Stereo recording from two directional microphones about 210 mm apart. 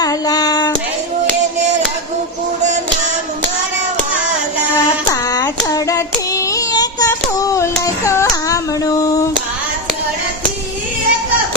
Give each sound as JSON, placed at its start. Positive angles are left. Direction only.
{"t": 0.0, "sound": "a sound", "side_deg": 20}
{"t": 5.1, "sound": "hands", "side_deg": 20}
{"t": 5.6, "sound": "female singing", "side_deg": 15}